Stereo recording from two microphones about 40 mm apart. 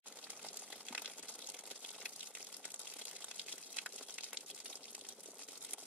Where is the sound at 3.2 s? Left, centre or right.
Centre.